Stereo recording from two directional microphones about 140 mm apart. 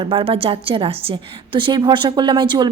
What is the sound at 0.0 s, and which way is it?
A woman's voice, 40° right (ahead or behind).